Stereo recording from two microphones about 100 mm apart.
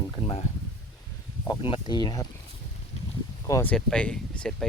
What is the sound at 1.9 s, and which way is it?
Speech, 45° left (ahead or behind).